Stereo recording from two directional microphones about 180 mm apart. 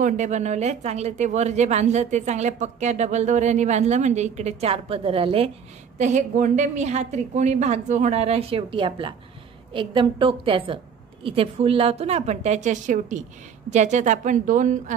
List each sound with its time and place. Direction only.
0.0 s a woman's voice: 40° right (ahead or behind)
5.9 s a woman's voice: 40° right (ahead or behind)